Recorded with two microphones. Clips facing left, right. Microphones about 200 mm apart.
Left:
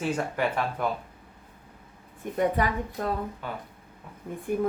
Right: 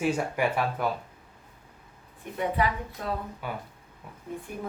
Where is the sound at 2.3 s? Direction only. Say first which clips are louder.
Left 2 dB; 45° left (ahead or behind).